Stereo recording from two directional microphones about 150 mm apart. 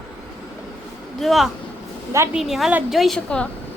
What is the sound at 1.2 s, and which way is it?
A woman's voice, centre (ahead or behind).